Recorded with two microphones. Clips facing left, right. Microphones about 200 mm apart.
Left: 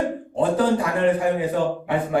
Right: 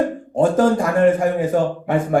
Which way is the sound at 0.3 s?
45° right (ahead or behind).